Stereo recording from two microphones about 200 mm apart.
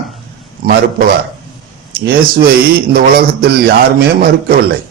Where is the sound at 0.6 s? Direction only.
50° right (ahead or behind).